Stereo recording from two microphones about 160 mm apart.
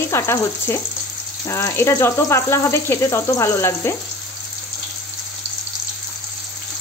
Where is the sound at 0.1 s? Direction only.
15° left (ahead or behind).